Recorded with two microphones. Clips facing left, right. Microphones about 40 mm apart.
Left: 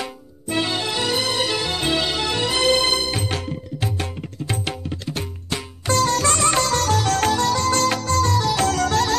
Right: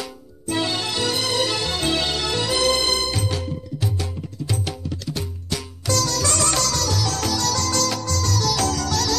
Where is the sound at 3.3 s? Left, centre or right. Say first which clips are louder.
Left 1 dB; left.